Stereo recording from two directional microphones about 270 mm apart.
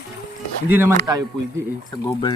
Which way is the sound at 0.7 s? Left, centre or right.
Centre.